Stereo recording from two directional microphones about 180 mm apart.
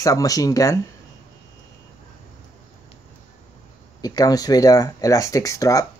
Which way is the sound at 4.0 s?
20° left (ahead or behind).